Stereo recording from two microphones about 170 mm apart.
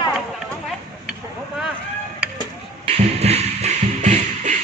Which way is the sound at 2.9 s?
40° right (ahead or behind).